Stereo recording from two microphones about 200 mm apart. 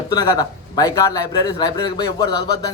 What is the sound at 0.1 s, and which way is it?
A man's voice, 20° left (ahead or behind).